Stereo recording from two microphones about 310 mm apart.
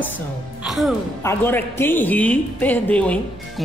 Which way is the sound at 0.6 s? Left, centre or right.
Centre.